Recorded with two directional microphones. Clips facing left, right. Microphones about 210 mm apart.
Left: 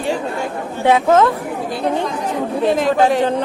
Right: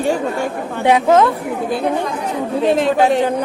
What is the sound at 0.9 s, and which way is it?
Speech, 15° right (ahead or behind).